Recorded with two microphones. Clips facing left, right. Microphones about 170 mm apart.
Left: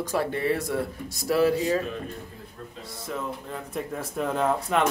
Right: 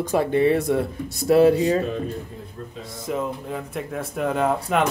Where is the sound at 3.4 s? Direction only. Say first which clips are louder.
Right 3 dB; 5° right (ahead or behind).